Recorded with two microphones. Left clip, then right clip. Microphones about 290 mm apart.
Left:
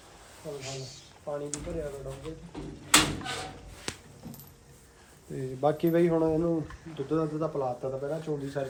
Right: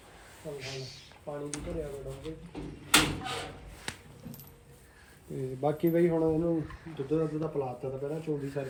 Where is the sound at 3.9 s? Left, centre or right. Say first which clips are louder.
Left 2 dB; left.